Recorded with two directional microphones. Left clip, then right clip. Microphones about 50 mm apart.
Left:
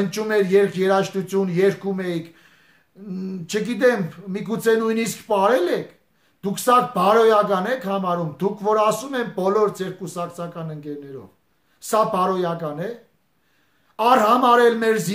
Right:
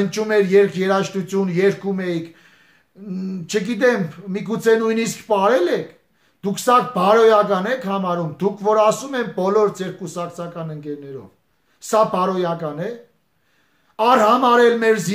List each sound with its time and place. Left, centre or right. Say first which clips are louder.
0.0 s speech: right 3 dB; left
13.9 s speech: right 2 dB; left